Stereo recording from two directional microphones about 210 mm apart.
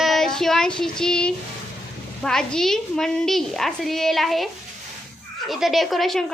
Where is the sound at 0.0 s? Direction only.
Centre (ahead or behind).